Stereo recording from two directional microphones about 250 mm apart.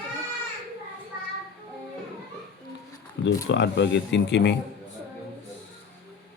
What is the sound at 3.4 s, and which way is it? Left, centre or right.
Speech, left.